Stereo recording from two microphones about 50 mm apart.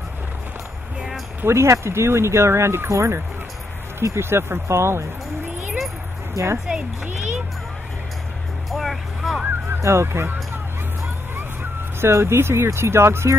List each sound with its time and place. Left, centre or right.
1.4 s speech: right
6.3 s speech: right
8.6 s vehicle: centre
9.8 s speech: right
12.0 s speech: right